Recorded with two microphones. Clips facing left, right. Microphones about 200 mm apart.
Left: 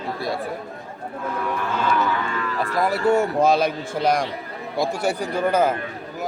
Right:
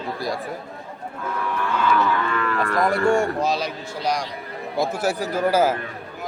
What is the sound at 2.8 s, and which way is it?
Speech, 5° left (ahead or behind).